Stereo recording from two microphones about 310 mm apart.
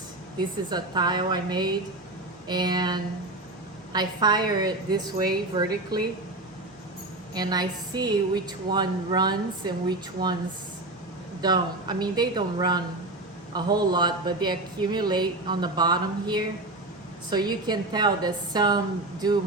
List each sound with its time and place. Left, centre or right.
0.3 s speech: centre
7.3 s speech: centre
10.2 s speech: right
11.3 s speech: centre